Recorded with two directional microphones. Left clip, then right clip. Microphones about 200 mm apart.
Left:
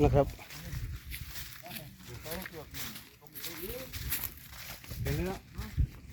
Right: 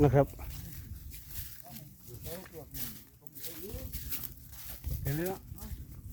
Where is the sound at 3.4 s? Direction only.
10° left (ahead or behind).